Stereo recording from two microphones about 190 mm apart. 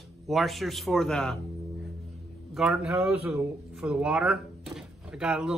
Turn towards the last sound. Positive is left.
turn(degrees=-5)  # may be behind; listen again after turning